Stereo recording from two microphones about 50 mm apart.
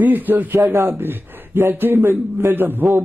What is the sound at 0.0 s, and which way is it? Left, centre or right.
A man's voice, right.